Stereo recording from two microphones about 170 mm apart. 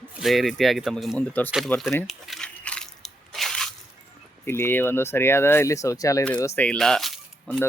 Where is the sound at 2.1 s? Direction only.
Centre (ahead or behind).